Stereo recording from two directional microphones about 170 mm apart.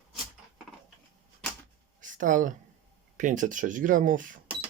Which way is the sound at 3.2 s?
50° right (ahead or behind).